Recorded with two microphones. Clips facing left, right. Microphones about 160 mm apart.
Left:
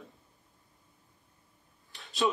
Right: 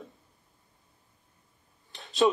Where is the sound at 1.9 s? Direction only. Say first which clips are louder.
Right 7 dB; centre (ahead or behind).